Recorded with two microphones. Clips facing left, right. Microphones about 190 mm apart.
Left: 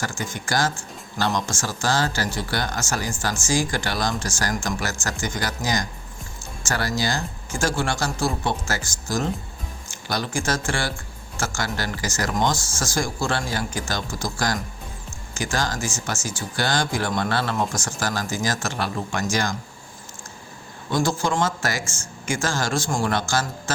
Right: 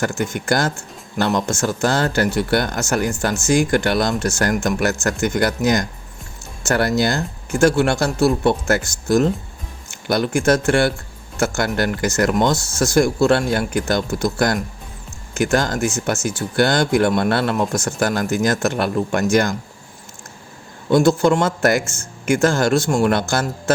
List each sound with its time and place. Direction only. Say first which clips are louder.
0.0 s speech: right 8 dB; 60° right (ahead or behind)
20.9 s speech: right 9 dB; 60° right (ahead or behind)